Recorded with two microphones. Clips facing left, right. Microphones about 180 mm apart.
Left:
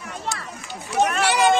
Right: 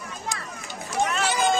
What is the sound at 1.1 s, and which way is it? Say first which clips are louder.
Run: left 4 dB; 70° left (ahead or behind).